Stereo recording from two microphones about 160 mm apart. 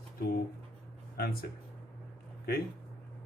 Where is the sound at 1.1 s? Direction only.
70° left (ahead or behind).